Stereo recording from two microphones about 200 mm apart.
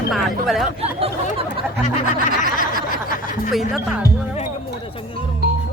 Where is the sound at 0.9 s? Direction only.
30° right (ahead or behind).